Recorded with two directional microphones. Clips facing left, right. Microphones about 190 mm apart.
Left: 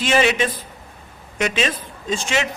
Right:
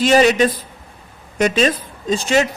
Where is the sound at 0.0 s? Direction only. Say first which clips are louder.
Right 6 dB; 40° right (ahead or behind).